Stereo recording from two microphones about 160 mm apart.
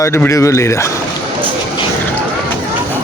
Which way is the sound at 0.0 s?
15° left (ahead or behind).